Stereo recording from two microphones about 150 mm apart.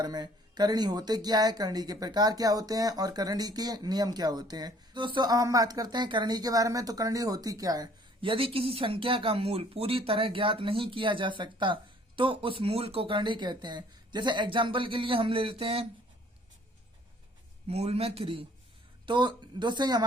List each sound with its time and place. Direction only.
0.0 s speech: 25° right (ahead or behind)
17.7 s a man's voice: 45° right (ahead or behind)